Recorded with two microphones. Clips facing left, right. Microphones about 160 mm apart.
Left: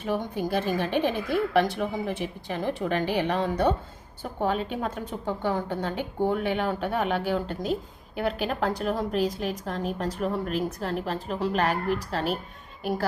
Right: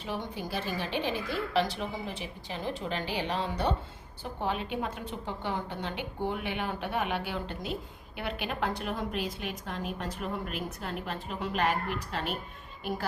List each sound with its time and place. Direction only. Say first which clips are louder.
0.0 s a woman's voice: left 7 dB; 50° left (ahead or behind)